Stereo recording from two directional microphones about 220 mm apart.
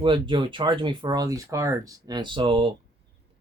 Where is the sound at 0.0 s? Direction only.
20° right (ahead or behind).